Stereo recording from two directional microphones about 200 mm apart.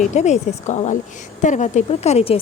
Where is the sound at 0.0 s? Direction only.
35° left (ahead or behind).